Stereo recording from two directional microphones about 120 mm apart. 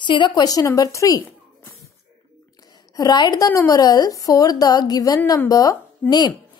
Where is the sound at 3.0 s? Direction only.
35° left (ahead or behind).